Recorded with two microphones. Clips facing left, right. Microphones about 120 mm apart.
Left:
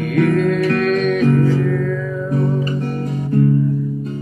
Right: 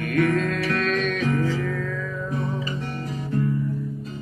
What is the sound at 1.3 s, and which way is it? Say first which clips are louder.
Music: left 8 dB; 50° left (ahead or behind).